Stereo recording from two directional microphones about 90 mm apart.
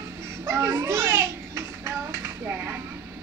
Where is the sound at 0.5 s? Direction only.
30° right (ahead or behind).